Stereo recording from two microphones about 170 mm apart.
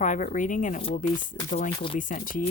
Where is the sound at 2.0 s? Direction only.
50° left (ahead or behind).